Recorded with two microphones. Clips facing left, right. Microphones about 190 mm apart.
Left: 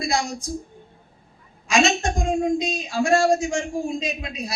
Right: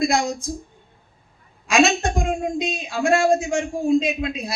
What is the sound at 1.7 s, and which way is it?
A man's voice, 60° right (ahead or behind).